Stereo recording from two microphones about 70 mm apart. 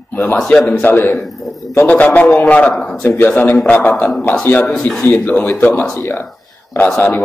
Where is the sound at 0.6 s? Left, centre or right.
Left.